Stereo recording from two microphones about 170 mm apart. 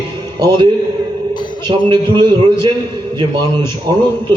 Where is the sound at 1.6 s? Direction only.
25° right (ahead or behind).